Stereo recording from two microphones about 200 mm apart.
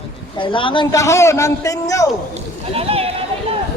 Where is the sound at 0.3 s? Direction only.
25° left (ahead or behind).